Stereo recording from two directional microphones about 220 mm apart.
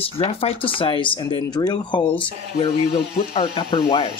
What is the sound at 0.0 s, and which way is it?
Speech, 25° left (ahead or behind).